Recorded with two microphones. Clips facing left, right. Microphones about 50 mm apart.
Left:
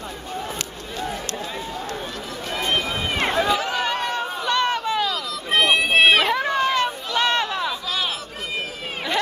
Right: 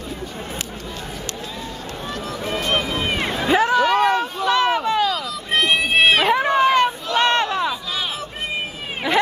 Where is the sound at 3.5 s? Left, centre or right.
Right.